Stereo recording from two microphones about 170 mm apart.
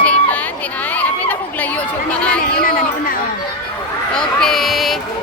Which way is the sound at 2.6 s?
55° left (ahead or behind).